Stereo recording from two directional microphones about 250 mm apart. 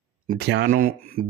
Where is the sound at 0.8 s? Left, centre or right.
Right.